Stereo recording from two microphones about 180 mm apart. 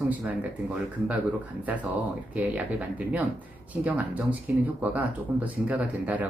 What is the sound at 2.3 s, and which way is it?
Speech, 10° right (ahead or behind).